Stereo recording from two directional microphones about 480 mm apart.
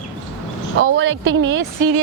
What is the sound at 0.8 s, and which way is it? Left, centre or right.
Speech, right.